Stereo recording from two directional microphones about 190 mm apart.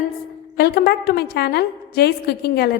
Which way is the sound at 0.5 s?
55° left (ahead or behind).